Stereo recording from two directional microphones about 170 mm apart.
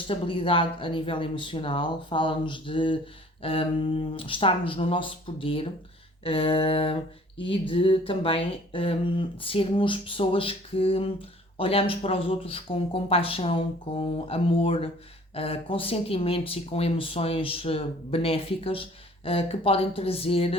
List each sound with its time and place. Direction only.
0.1 s speech: 30° left (ahead or behind)